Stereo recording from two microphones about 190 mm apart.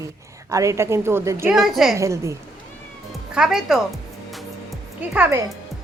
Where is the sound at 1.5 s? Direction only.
Centre (ahead or behind).